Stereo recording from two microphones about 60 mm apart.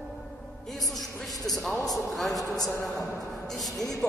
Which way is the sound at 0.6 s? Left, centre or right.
Centre.